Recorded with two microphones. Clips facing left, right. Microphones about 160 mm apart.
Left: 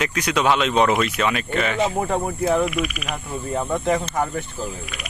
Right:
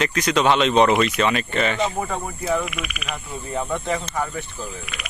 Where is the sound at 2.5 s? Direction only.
40° left (ahead or behind).